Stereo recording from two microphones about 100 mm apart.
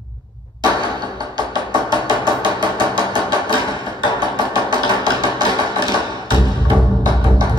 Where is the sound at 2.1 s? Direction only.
45° right (ahead or behind).